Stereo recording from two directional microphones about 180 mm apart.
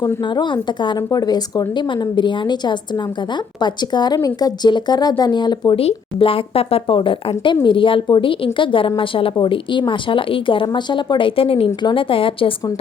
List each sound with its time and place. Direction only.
0.0 s speech: 25° left (ahead or behind)